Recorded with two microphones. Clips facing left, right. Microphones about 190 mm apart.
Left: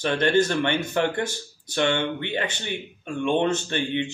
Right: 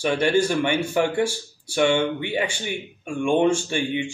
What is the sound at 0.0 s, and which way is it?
Speech, 10° right (ahead or behind).